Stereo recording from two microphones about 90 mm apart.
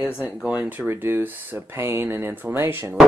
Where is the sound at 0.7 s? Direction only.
25° right (ahead or behind).